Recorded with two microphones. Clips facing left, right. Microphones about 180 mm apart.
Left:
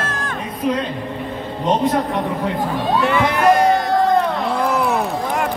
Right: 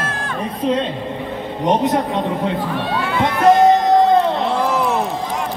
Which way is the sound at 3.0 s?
75° left (ahead or behind).